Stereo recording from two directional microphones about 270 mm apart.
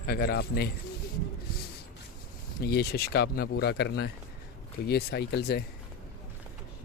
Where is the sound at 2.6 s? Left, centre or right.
Left.